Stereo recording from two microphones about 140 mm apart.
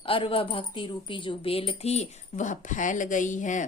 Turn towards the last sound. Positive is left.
turn(degrees=65)  # may be behind; listen again after turning